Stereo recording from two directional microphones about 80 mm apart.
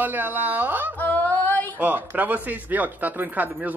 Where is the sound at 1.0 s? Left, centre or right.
Left.